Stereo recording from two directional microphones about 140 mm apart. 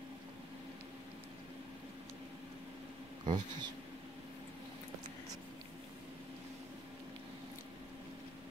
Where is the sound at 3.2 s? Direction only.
30° right (ahead or behind).